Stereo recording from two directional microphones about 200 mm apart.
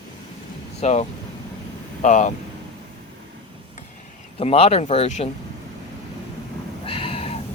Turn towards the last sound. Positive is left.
turn(degrees=30)  # may be behind; listen again after turning